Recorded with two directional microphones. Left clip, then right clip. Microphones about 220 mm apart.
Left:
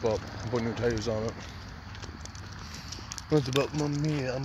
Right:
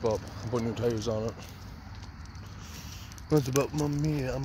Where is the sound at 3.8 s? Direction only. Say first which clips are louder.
Even; 20° right (ahead or behind).